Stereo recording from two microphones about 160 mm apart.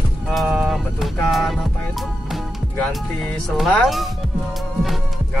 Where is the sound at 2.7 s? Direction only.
5° left (ahead or behind).